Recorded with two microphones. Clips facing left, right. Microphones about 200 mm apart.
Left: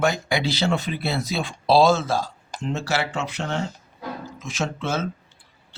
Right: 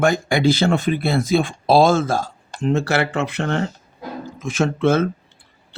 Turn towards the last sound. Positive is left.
turn(degrees=-55)  # may be behind; listen again after turning